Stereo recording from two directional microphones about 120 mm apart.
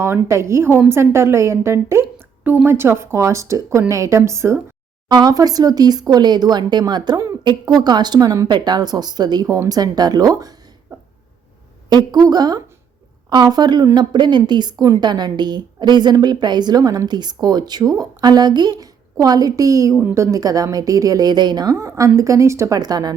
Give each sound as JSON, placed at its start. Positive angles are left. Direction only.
{"t": 0.0, "sound": "a woman's voice", "side_deg": -20}
{"t": 5.0, "sound": "a woman's voice", "side_deg": -35}
{"t": 11.9, "sound": "a woman's voice", "side_deg": -35}